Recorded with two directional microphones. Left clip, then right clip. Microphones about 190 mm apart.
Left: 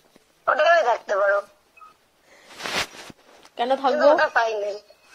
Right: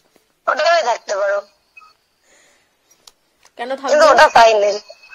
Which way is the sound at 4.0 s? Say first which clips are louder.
Right 11 dB; 65° right (ahead or behind).